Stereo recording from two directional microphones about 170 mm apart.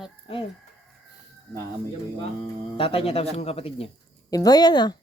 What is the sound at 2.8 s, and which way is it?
Speech, 35° left (ahead or behind).